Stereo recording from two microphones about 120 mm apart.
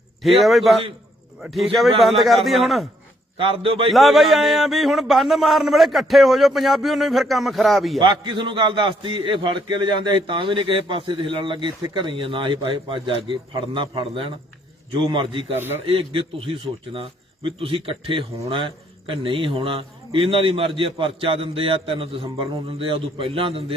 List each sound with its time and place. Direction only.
0.2 s a man's voice: centre (ahead or behind)
3.3 s a man's voice: 45° right (ahead or behind)
3.9 s a man's voice: centre (ahead or behind)
7.9 s a man's voice: 40° right (ahead or behind)
15.5 s a man's voice: 20° right (ahead or behind)
15.9 s a man's voice: 50° right (ahead or behind)